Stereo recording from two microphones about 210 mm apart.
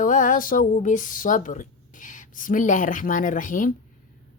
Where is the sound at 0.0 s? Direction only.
40° left (ahead or behind).